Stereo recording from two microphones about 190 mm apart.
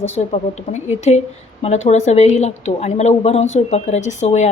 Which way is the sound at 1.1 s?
35° left (ahead or behind).